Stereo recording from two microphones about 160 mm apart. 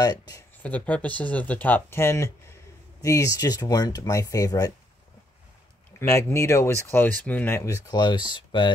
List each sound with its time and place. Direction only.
0.0 s a sound: 25° left (ahead or behind)
0.7 s speech: 10° left (ahead or behind)
5.9 s speech: 15° left (ahead or behind)